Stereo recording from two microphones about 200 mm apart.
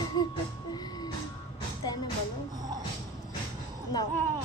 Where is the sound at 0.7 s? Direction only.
20° left (ahead or behind).